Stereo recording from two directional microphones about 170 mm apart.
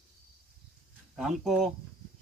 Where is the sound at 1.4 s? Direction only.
Centre (ahead or behind).